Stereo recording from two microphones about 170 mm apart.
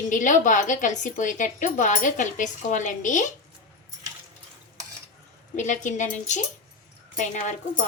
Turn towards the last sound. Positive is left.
turn(degrees=45)  # may be behind; listen again after turning